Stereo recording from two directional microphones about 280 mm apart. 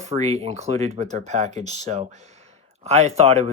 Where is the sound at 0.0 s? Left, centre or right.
Right.